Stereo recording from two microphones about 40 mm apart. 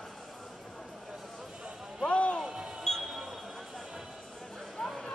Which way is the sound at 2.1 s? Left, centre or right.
Left.